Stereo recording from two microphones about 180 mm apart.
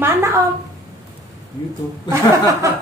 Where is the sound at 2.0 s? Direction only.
15° right (ahead or behind).